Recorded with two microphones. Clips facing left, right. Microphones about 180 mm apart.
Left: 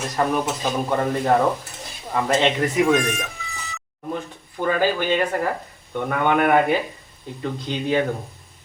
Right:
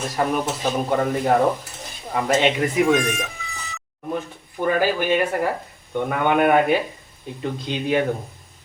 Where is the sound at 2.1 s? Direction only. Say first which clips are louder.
Even; 10° right (ahead or behind).